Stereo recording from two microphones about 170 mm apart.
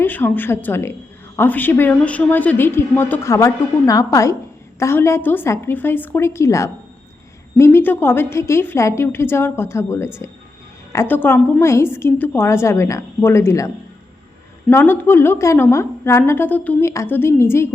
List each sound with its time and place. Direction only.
0.0 s a woman's voice: 10° left (ahead or behind)
14.7 s a woman's voice: 15° left (ahead or behind)